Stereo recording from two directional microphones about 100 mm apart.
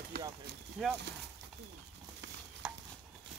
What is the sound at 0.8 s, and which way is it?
Speech, centre (ahead or behind).